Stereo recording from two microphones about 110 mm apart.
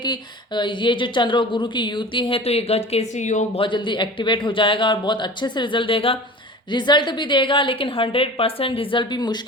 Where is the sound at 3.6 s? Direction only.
45° left (ahead or behind).